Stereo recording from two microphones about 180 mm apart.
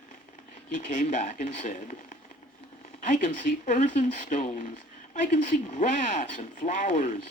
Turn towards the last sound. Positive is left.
turn(degrees=45)  # may be behind; listen again after turning